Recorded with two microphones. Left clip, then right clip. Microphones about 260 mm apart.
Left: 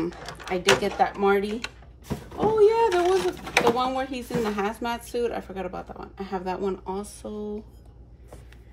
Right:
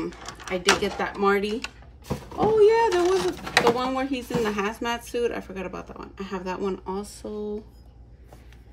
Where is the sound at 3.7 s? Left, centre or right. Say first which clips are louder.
Even; centre.